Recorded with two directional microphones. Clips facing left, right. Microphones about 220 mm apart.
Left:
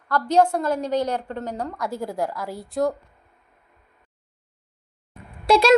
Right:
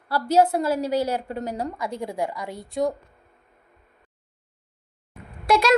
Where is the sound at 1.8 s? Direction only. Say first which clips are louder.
Left 1 dB; centre (ahead or behind).